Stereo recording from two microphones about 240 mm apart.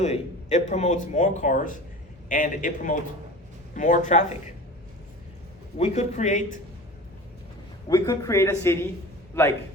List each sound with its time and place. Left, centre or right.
0.0 s a man's voice: left
5.7 s a man's voice: left
7.9 s speech: centre